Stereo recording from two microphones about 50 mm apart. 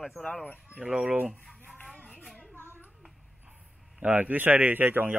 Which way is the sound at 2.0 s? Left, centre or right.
Left.